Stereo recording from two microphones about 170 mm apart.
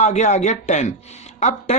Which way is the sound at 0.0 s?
45° left (ahead or behind).